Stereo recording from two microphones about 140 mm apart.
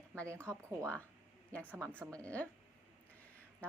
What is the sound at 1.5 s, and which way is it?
Speech, 10° left (ahead or behind).